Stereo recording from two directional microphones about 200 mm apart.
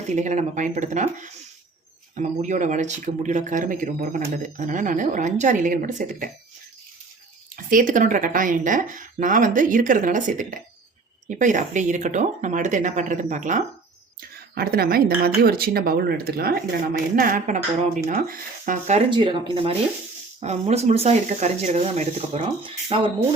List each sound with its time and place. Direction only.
0.1 s speech: 35° right (ahead or behind)
7.5 s speech: 45° right (ahead or behind)
19.1 s speech: 25° right (ahead or behind)